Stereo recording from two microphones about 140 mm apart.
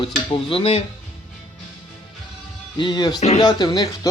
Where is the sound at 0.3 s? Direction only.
40° left (ahead or behind).